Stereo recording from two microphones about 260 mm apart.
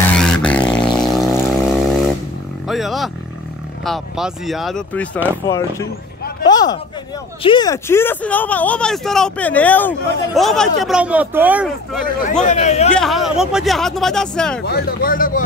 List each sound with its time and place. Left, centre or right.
0.1 s a sound: centre
1.1 s vehicle: centre
2.7 s roaring cats: centre
3.8 s speech: centre
6.4 s a sound: centre
7.4 s speech: centre
12.4 s speech: left
12.9 s speech: centre
14.6 s speech: left